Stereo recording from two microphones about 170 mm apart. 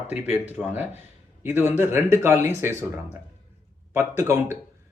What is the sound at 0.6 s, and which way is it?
A man's voice, 10° right (ahead or behind).